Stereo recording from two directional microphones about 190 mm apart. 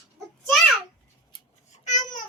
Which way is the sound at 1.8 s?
40° left (ahead or behind).